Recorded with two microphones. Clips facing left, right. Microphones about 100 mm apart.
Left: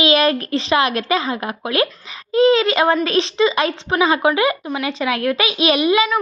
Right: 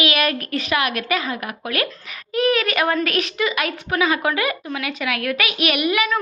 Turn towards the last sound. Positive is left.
turn(degrees=20)  # may be behind; listen again after turning